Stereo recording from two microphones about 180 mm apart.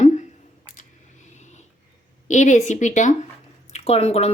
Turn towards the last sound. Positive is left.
turn(degrees=35)  # may be behind; listen again after turning